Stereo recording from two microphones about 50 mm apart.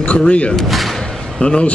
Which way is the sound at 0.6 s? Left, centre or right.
Centre.